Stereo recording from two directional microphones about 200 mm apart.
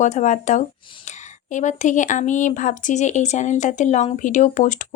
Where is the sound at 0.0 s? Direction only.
35° left (ahead or behind).